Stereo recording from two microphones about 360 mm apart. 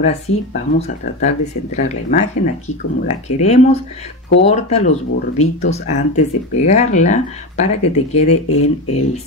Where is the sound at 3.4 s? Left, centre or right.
Centre.